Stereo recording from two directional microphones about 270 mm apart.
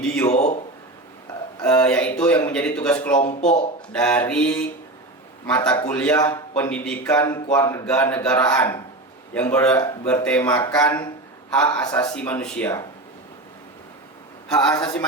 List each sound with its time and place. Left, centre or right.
0.0 s a man's voice: centre
0.3 s a man's voice: left
1.6 s a man's voice: centre
3.2 s speech: left
3.9 s a man's voice: centre
14.4 s a man's voice: centre